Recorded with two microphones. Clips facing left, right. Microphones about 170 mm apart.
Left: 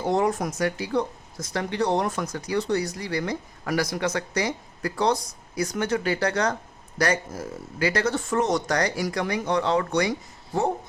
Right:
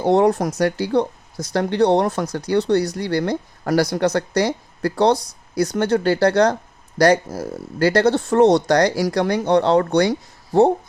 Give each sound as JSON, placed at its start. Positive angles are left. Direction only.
{"t": 0.0, "sound": "speech", "side_deg": -65}